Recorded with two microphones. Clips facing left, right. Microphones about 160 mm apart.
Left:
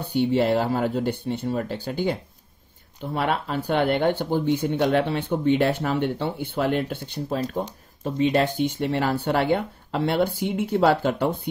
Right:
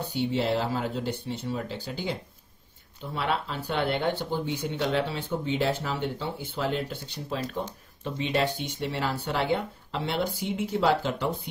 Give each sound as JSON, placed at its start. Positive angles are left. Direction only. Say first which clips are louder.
{"t": 0.1, "sound": "speech", "louder": "left 7 dB", "side_deg": 55}
{"t": 3.2, "sound": "speech", "louder": "left 4 dB", "side_deg": 50}